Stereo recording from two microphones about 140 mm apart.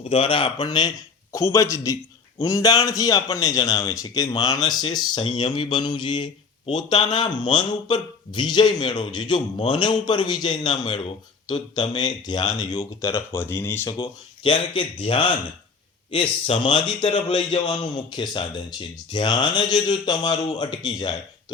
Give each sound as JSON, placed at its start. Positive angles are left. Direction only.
{"t": 0.1, "sound": "a man's voice", "side_deg": 45}
{"t": 14.0, "sound": "speech", "side_deg": 35}